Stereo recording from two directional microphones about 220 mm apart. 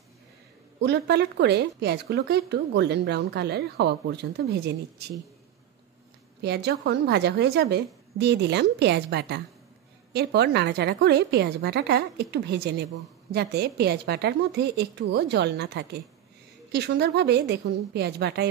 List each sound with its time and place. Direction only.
0.7 s speech: 50° right (ahead or behind)
6.4 s speech: 50° right (ahead or behind)